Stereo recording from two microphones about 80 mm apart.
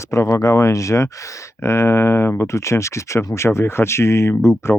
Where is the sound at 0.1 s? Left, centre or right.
Left.